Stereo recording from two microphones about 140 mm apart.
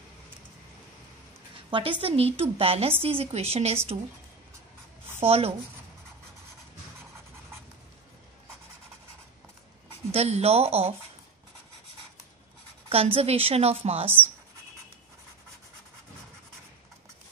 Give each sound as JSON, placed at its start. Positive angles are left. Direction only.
{"t": 1.7, "sound": "a woman's voice", "side_deg": -40}
{"t": 5.2, "sound": "a woman's voice", "side_deg": -45}
{"t": 10.1, "sound": "a woman's voice", "side_deg": -50}
{"t": 12.9, "sound": "a woman's voice", "side_deg": -45}
{"t": 14.0, "sound": "speech", "side_deg": -15}